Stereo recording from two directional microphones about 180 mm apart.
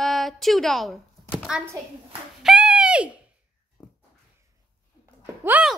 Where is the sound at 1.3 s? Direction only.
5° right (ahead or behind).